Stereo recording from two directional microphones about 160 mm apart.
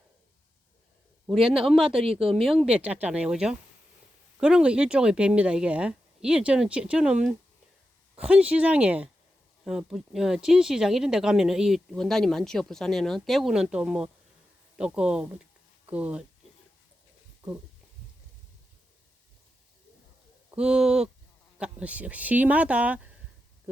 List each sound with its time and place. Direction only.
1.4 s speech: 35° right (ahead or behind)
1.6 s speech: centre (ahead or behind)
1.9 s speech: 35° right (ahead or behind)
2.5 s speech: 5° right (ahead or behind)
20.5 s speech: 5° right (ahead or behind)